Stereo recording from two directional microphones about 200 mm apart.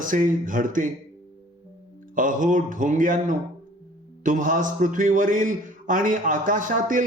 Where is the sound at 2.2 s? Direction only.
40° right (ahead or behind).